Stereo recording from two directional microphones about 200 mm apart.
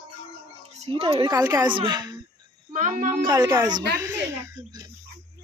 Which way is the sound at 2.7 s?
40° right (ahead or behind).